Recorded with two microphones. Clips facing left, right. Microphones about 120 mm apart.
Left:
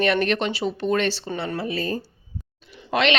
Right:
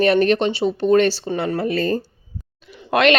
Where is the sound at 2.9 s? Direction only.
50° right (ahead or behind).